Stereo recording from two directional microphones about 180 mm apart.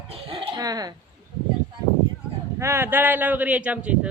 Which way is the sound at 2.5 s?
15° right (ahead or behind).